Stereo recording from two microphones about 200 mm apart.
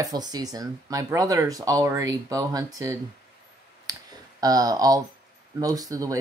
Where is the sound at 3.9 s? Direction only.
20° right (ahead or behind).